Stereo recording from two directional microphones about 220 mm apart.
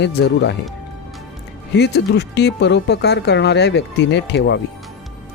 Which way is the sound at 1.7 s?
50° left (ahead or behind).